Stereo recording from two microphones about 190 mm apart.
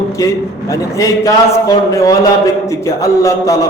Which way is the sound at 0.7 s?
15° left (ahead or behind).